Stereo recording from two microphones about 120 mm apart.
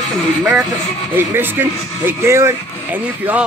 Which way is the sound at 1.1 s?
15° right (ahead or behind).